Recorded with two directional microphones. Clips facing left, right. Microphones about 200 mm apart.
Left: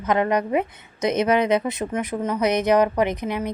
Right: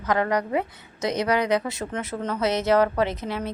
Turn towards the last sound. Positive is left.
turn(degrees=15)  # may be behind; listen again after turning